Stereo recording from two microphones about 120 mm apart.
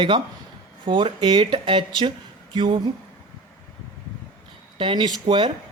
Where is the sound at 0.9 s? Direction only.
45° right (ahead or behind).